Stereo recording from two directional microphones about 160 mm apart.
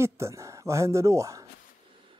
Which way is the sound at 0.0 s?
15° right (ahead or behind).